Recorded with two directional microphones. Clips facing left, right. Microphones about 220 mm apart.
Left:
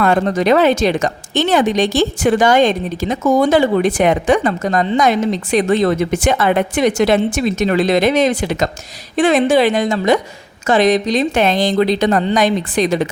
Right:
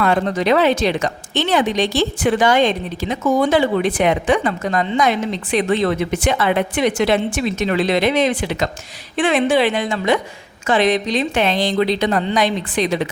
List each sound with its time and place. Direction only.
0.0 s a woman's voice: 45° left (ahead or behind)